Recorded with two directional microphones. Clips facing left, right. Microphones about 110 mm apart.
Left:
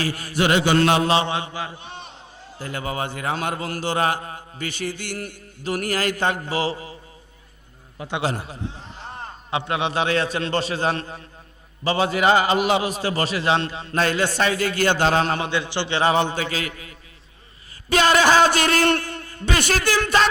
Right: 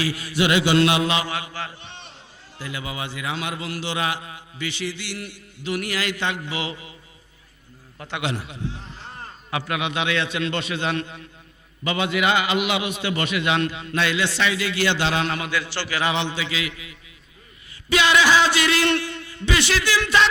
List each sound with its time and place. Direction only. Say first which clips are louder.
0.0 s a man's voice: even; 45° left (ahead or behind); by 2.0 s 30° left (ahead or behind)
2.6 s a man's voice: left 4 dB; 45° left (ahead or behind)
7.9 s a man's voice: left 4 dB; 15° left (ahead or behind)
8.2 s a man's voice: left 1 dB; 40° left (ahead or behind); by 16.0 s 20° left (ahead or behind)
16.0 s a man's voice: left 5 dB; 40° left (ahead or behind)